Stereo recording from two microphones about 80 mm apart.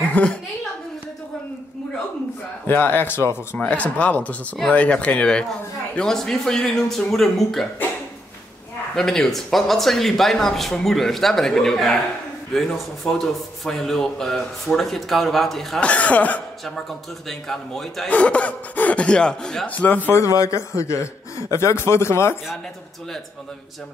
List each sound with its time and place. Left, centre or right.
0.1 s a woman's voice: centre
2.6 s a man's voice: left
3.5 s a man's voice: centre
8.9 s a man's voice: centre
15.8 s a man's voice: centre
17.3 s a man's voice: centre
18.0 s speech: centre
19.7 s a man's voice: left
20.3 s speech: left